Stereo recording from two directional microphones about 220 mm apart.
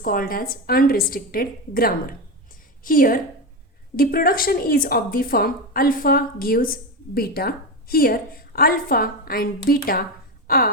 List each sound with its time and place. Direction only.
0.0 s speech: 40° left (ahead or behind)